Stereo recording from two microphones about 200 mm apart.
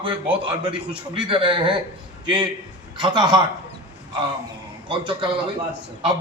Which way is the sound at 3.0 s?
20° right (ahead or behind).